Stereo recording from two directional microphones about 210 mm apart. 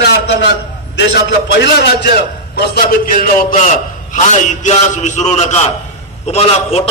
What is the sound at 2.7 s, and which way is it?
A man's voice, 40° left (ahead or behind).